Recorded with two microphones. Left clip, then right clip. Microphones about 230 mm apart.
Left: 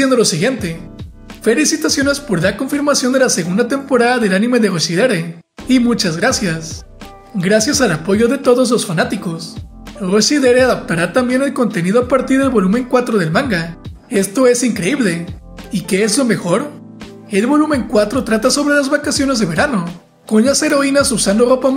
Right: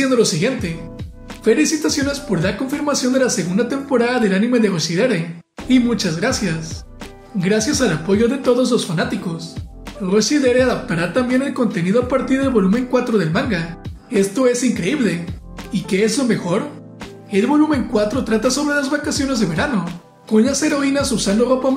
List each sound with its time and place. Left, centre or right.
0.0 s speech: left